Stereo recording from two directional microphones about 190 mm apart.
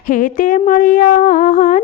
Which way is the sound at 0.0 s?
45° left (ahead or behind).